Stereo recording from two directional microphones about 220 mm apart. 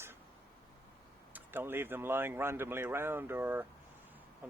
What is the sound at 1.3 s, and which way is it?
Speech, 10° right (ahead or behind).